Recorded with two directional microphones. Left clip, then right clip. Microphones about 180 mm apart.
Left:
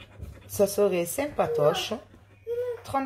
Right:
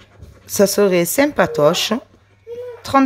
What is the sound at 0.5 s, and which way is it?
Speech, 45° right (ahead or behind).